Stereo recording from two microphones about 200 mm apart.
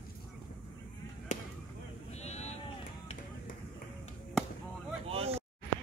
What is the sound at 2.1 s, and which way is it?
Sheep, 35° left (ahead or behind).